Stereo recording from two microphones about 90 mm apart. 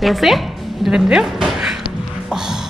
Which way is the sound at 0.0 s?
Centre (ahead or behind).